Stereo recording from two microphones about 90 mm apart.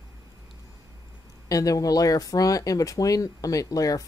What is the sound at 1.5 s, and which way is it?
Speech, 40° left (ahead or behind).